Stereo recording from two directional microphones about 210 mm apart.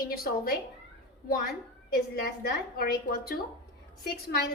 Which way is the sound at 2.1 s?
45° left (ahead or behind).